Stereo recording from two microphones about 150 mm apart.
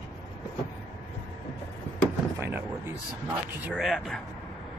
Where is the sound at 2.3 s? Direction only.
15° right (ahead or behind).